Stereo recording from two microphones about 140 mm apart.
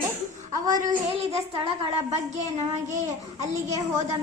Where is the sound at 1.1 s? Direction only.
45° right (ahead or behind); by 3.6 s 60° right (ahead or behind).